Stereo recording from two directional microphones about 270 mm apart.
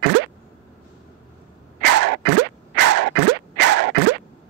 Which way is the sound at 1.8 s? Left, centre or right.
Right.